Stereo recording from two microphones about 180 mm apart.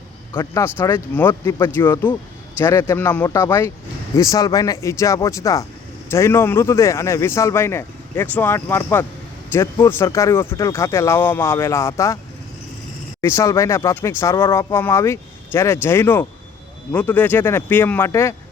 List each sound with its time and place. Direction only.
0.3 s a man's voice: 15° left (ahead or behind)
13.2 s a man's voice: 15° left (ahead or behind)